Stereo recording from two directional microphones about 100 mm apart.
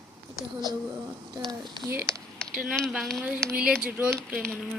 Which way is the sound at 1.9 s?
25° right (ahead or behind).